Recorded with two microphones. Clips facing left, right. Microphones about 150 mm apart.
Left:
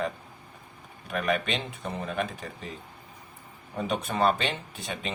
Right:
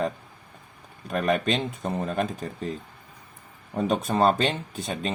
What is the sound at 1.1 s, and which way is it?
Speech, 35° right (ahead or behind).